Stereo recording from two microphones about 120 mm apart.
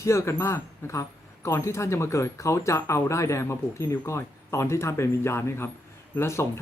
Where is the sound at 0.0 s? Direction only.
25° left (ahead or behind).